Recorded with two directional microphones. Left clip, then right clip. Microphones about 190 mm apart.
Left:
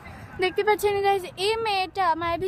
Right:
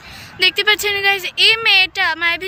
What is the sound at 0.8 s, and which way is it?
Speech, 40° left (ahead or behind).